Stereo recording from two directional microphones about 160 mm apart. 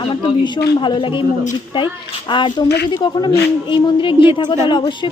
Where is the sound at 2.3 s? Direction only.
30° left (ahead or behind).